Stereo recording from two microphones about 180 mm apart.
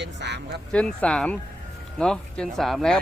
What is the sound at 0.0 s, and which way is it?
Speech, 75° right (ahead or behind).